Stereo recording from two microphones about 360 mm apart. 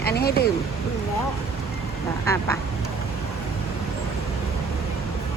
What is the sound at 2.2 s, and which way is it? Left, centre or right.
Quack, centre.